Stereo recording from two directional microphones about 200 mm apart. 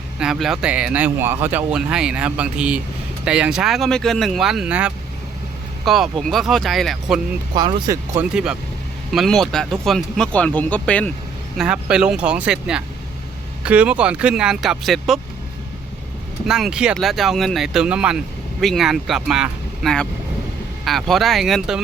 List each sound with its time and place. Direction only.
0.2 s speech: centre (ahead or behind)
7.5 s speech: 20° right (ahead or behind)
8.3 s speech: 5° right (ahead or behind)
11.5 s speech: 5° right (ahead or behind)
16.5 s speech: 5° right (ahead or behind)